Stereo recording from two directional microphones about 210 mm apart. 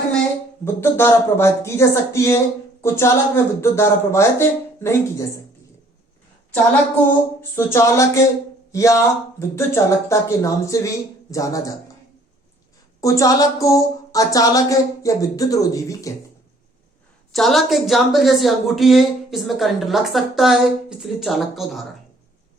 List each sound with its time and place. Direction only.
0.6 s speech: 10° left (ahead or behind)
7.5 s speech: 15° left (ahead or behind)
13.0 s speech: 15° left (ahead or behind)
17.3 s a woman's voice: centre (ahead or behind)